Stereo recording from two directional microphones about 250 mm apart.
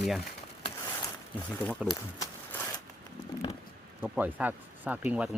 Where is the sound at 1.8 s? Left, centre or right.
Centre.